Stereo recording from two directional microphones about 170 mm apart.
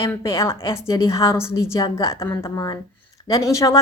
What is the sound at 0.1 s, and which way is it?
A woman's voice, 15° left (ahead or behind).